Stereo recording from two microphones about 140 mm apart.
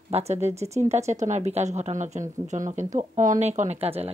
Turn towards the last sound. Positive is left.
turn(degrees=-45)  # may be behind; listen again after turning